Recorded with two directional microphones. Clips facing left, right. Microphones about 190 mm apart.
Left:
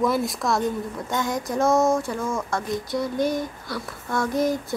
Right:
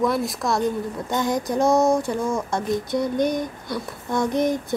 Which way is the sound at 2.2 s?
20° right (ahead or behind).